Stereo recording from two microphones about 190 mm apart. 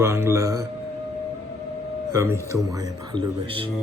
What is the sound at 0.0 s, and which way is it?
Speech, 15° right (ahead or behind).